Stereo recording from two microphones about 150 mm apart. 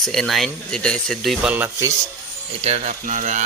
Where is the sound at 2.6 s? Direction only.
50° right (ahead or behind).